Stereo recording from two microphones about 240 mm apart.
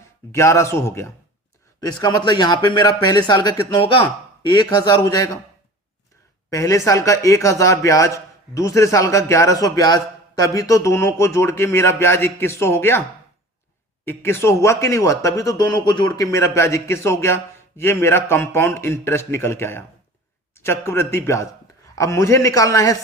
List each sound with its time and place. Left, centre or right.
0.3 s a man's voice: centre
6.5 s a man's voice: centre
14.0 s a man's voice: centre